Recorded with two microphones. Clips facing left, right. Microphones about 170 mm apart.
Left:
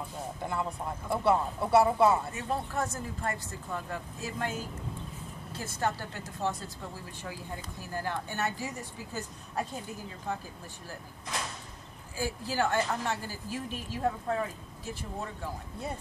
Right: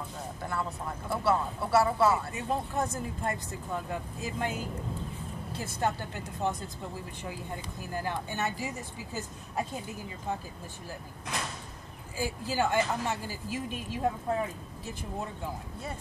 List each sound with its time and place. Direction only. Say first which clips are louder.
0.4 s speech: left 1 dB; 20° left (ahead or behind)
2.3 s speech: right 1 dB; 15° right (ahead or behind)
5.8 s speech: right 1 dB; 15° right (ahead or behind)
7.9 s speech: right 1 dB; 15° right (ahead or behind)
12.2 s speech: right 1 dB; 15° right (ahead or behind)